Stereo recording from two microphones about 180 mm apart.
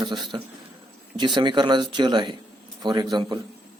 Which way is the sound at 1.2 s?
25° right (ahead or behind).